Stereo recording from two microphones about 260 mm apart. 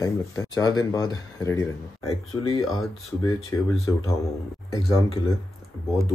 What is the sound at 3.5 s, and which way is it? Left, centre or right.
Speech, centre.